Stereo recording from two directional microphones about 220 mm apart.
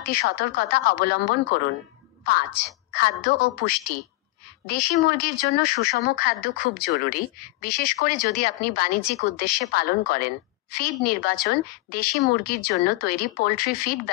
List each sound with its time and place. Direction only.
0.0 s a woman's voice: 45° left (ahead or behind)